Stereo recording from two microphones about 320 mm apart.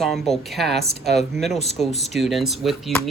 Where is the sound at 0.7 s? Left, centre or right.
Right.